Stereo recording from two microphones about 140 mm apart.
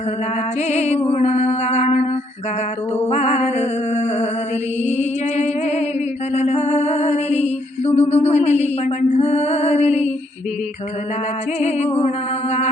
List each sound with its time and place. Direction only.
0.7 s music: 50° left (ahead or behind)
3.1 s music: 55° left (ahead or behind)
11.6 s music: 50° left (ahead or behind)